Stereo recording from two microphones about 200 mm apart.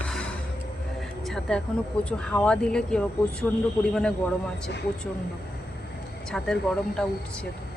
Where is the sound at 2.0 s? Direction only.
5° left (ahead or behind).